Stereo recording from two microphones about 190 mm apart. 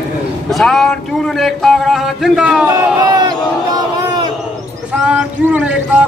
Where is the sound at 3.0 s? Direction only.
20° right (ahead or behind).